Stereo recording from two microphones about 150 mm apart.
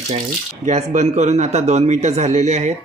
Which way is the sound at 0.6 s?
50° right (ahead or behind).